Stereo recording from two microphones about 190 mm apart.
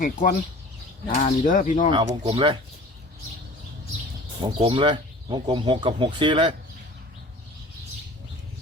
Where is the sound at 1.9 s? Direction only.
30° right (ahead or behind).